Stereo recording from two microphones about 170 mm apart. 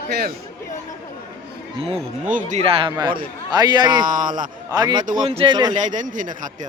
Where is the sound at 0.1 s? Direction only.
65° right (ahead or behind).